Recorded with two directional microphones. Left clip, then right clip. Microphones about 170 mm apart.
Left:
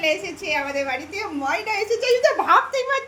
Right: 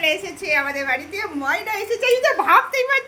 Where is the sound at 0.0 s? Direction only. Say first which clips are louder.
Right 1 dB; 10° left (ahead or behind).